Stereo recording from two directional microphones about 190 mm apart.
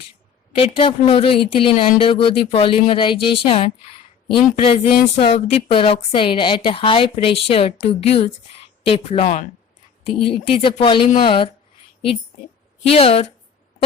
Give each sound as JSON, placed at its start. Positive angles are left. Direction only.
{"t": 0.6, "sound": "a woman's voice", "side_deg": 30}
{"t": 10.2, "sound": "a woman's voice", "side_deg": 25}
{"t": 12.9, "sound": "speech", "side_deg": 30}